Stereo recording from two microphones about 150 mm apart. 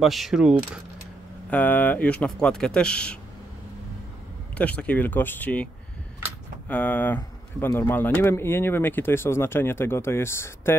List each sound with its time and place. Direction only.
0.0 s coin: centre (ahead or behind)
1.5 s speech: 10° left (ahead or behind)
4.6 s speech: 10° left (ahead or behind)
6.7 s speech: 10° left (ahead or behind)